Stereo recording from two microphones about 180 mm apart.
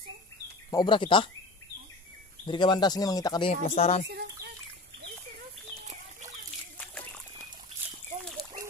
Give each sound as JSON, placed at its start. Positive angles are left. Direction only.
{"t": 0.7, "sound": "speech", "side_deg": 25}
{"t": 2.4, "sound": "speech", "side_deg": 25}
{"t": 4.1, "sound": "chicken", "side_deg": -65}